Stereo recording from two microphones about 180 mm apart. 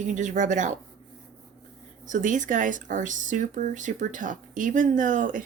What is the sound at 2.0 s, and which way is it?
A woman's voice, 45° right (ahead or behind).